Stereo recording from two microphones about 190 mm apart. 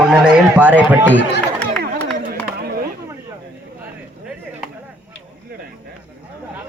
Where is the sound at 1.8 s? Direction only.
55° right (ahead or behind).